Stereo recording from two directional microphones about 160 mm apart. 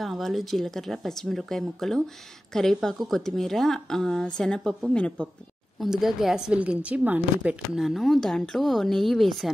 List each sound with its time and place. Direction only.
0.0 s a woman's voice: centre (ahead or behind)